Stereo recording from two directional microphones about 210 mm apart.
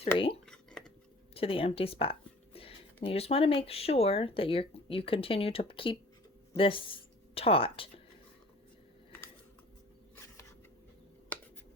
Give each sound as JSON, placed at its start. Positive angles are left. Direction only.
{"t": 0.0, "sound": "speech", "side_deg": 25}
{"t": 0.4, "sound": "a sound", "side_deg": 5}
{"t": 1.3, "sound": "speech", "side_deg": 25}